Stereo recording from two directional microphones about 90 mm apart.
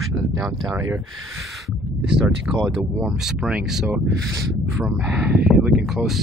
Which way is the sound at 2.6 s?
10° right (ahead or behind).